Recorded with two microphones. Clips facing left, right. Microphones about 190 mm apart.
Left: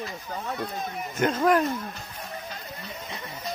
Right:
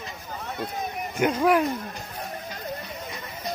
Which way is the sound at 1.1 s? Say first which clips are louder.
Right 1 dB; 10° right (ahead or behind).